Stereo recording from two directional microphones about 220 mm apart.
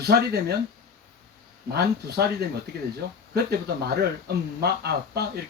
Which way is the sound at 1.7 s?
45° right (ahead or behind).